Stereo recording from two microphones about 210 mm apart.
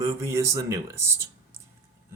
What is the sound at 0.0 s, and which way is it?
Speech, 15° right (ahead or behind).